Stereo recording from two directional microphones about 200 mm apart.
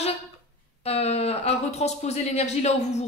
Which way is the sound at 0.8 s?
30° left (ahead or behind).